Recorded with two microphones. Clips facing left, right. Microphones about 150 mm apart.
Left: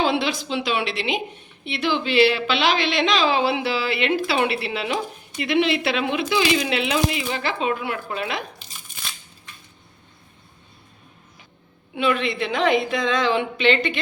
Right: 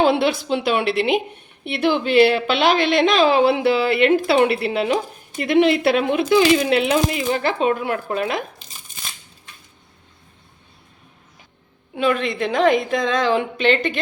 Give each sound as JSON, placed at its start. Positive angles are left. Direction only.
{"t": 0.0, "sound": "a woman's voice", "side_deg": -55}
{"t": 11.9, "sound": "a woman's voice", "side_deg": -45}